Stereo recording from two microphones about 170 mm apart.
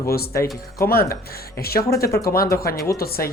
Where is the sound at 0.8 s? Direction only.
65° left (ahead or behind).